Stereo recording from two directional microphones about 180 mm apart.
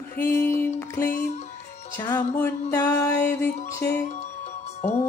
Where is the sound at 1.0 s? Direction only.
45° left (ahead or behind).